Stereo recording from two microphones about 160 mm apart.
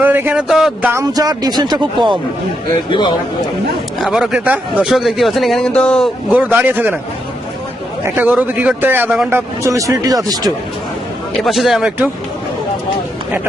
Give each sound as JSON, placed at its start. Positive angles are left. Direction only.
{"t": 0.0, "sound": "speech", "side_deg": -10}
{"t": 1.1, "sound": "speech", "side_deg": -25}
{"t": 2.9, "sound": "a man's voice", "side_deg": 30}
{"t": 4.0, "sound": "speech", "side_deg": -5}
{"t": 6.3, "sound": "speech", "side_deg": -10}
{"t": 8.0, "sound": "speech", "side_deg": -10}
{"t": 9.3, "sound": "speech", "side_deg": -20}
{"t": 11.4, "sound": "speech", "side_deg": 0}